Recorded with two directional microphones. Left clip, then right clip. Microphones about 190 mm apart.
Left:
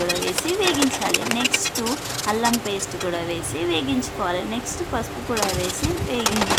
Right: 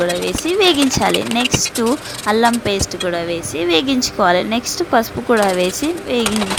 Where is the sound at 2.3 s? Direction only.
30° right (ahead or behind).